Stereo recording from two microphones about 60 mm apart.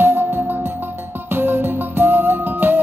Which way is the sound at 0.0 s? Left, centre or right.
Right.